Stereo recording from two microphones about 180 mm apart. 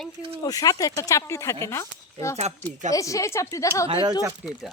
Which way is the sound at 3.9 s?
25° right (ahead or behind).